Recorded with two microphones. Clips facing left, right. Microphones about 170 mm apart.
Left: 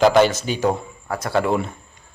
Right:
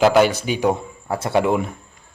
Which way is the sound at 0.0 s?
5° right (ahead or behind).